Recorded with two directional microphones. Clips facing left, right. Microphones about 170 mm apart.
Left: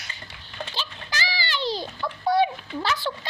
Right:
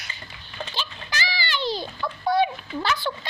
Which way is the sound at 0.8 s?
35° left (ahead or behind).